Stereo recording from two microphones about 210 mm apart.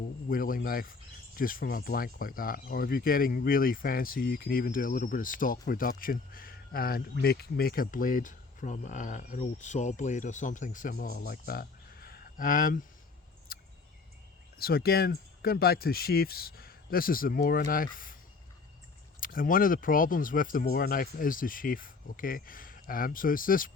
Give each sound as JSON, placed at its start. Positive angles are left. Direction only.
{"t": 0.3, "sound": "speech", "side_deg": 40}
{"t": 13.5, "sound": "a sound", "side_deg": 45}
{"t": 14.6, "sound": "speech", "side_deg": 45}
{"t": 19.2, "sound": "speech", "side_deg": 40}